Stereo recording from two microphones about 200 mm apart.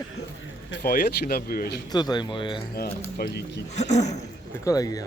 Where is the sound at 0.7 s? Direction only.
50° left (ahead or behind).